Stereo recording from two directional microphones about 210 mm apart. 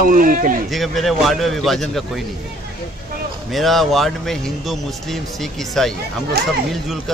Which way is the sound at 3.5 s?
Centre (ahead or behind).